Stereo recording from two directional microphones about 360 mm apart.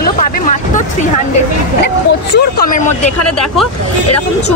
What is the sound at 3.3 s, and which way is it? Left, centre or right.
Speech, centre.